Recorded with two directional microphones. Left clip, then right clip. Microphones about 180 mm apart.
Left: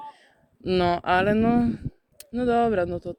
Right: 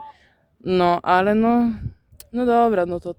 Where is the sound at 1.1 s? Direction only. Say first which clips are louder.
Right 4 dB; 30° right (ahead or behind).